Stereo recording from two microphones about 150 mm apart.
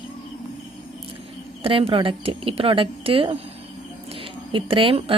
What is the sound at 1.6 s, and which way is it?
Speech, 40° right (ahead or behind).